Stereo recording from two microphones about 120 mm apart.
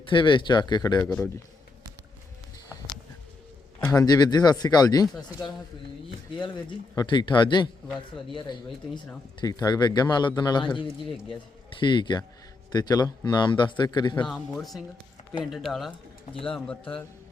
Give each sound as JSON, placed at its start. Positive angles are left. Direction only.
{"t": 0.0, "sound": "a man's voice", "side_deg": 40}
{"t": 3.9, "sound": "a man's voice", "side_deg": 35}
{"t": 6.4, "sound": "a man's voice", "side_deg": 40}
{"t": 9.4, "sound": "a man's voice", "side_deg": 35}
{"t": 14.3, "sound": "speech", "side_deg": 5}
{"t": 16.3, "sound": "speech", "side_deg": 50}